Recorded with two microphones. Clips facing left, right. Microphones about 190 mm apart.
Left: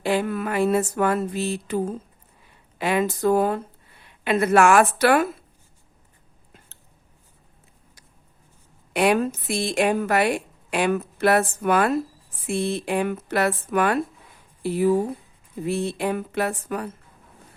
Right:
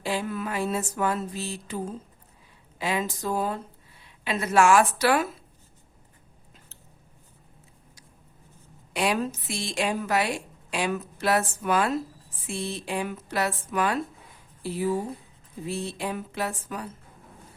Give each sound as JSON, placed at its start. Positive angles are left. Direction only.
{"t": 0.0, "sound": "a woman's voice", "side_deg": 60}
{"t": 8.9, "sound": "a woman's voice", "side_deg": 60}